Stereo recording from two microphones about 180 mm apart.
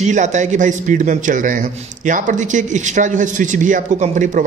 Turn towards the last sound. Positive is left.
turn(degrees=-45)  # may be behind; listen again after turning